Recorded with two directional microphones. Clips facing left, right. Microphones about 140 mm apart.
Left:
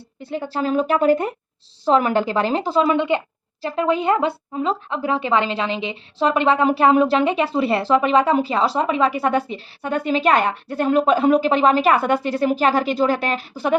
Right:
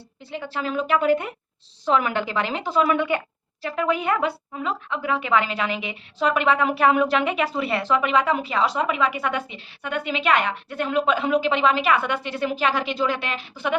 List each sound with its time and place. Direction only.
0.2 s a woman's voice: 45° left (ahead or behind)